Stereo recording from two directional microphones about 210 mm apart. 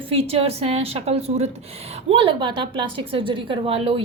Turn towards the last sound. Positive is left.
turn(degrees=-25)  # may be behind; listen again after turning